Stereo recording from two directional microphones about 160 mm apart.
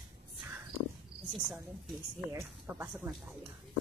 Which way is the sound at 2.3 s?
15° right (ahead or behind).